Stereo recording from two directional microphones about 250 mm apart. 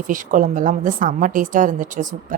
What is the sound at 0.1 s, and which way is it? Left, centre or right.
A woman's voice, right.